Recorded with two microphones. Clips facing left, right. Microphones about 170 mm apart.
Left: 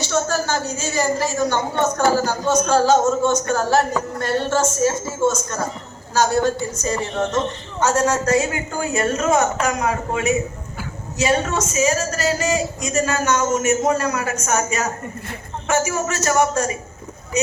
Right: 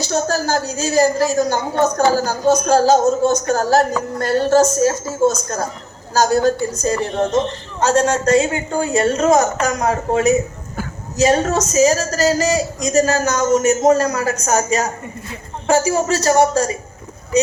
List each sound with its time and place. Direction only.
0.0 s a woman's voice: 35° right (ahead or behind)